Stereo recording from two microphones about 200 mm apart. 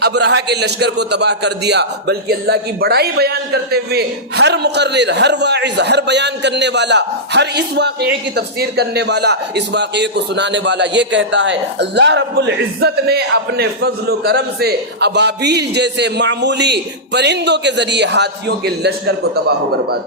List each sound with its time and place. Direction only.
0.0 s a man's voice: 55° right (ahead or behind)